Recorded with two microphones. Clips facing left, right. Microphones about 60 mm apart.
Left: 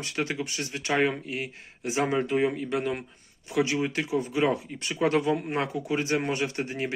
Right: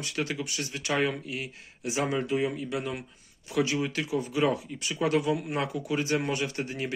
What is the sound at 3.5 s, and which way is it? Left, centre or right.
Speech, left.